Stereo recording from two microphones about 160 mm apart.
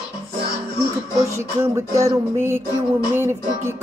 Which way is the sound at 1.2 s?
15° right (ahead or behind).